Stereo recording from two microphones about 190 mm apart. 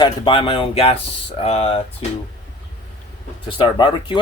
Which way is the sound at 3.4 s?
25° left (ahead or behind).